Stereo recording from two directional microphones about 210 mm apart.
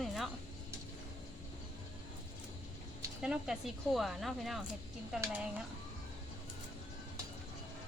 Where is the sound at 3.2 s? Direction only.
5° right (ahead or behind).